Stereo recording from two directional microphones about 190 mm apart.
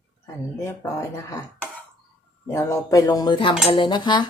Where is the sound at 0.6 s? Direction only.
15° left (ahead or behind).